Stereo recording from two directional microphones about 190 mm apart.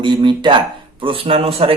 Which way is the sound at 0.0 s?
25° right (ahead or behind).